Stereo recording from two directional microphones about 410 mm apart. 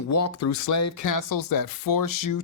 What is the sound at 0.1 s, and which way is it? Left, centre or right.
Speech, left.